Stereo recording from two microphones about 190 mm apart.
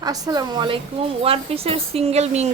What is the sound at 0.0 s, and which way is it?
A woman's voice, 20° right (ahead or behind).